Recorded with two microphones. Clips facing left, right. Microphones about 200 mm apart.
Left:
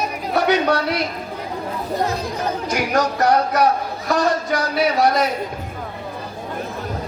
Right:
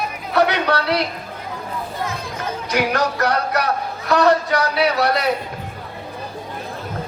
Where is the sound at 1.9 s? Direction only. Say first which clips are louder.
Left 9 dB; 35° left (ahead or behind).